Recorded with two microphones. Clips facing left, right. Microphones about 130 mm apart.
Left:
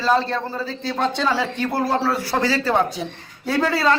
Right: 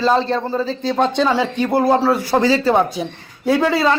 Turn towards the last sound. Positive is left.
turn(degrees=-15)  # may be behind; listen again after turning